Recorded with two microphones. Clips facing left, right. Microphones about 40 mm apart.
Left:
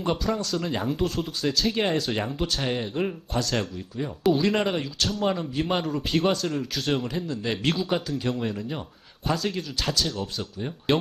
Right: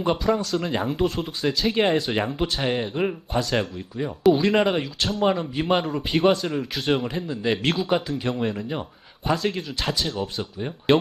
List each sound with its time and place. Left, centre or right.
0.0 s speech: centre
7.6 s speech: centre